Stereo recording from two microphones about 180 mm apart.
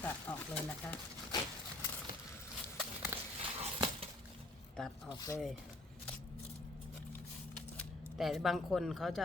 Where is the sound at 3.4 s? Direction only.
30° right (ahead or behind).